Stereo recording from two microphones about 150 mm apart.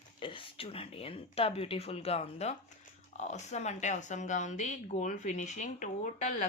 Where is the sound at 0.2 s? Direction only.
35° left (ahead or behind).